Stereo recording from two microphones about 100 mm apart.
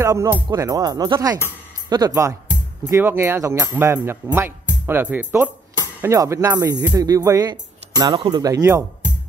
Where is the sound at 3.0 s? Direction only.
25° right (ahead or behind).